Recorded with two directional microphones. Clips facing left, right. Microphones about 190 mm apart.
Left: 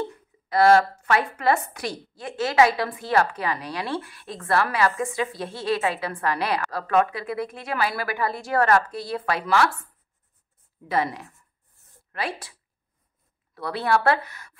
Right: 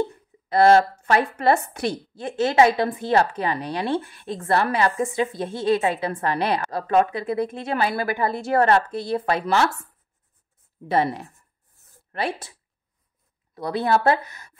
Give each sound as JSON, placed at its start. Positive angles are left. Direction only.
{"t": 0.5, "sound": "a woman's voice", "side_deg": -25}
{"t": 10.9, "sound": "a woman's voice", "side_deg": -30}
{"t": 13.6, "sound": "a woman's voice", "side_deg": -20}